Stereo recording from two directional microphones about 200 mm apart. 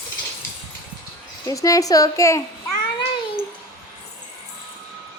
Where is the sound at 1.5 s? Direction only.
15° left (ahead or behind).